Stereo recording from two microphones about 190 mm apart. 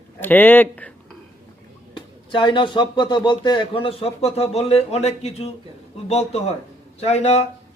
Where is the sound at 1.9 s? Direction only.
25° left (ahead or behind).